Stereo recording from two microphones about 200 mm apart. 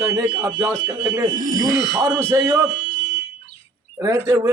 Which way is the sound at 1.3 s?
40° right (ahead or behind).